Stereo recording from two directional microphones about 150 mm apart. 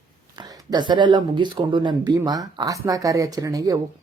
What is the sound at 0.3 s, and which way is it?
Speech, 30° right (ahead or behind).